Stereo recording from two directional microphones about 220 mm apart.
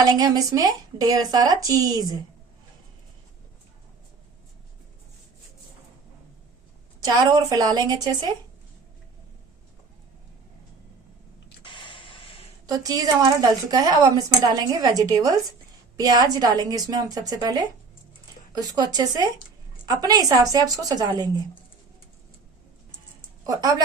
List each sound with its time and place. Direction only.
0.0 s a woman's voice: 15° right (ahead or behind)
7.0 s a woman's voice: 20° right (ahead or behind)
11.6 s a sound: 20° left (ahead or behind)
12.6 s a woman's voice: 15° right (ahead or behind)
23.4 s a woman's voice: 15° right (ahead or behind)